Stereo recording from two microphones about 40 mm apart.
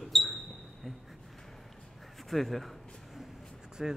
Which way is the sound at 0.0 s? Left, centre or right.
Centre.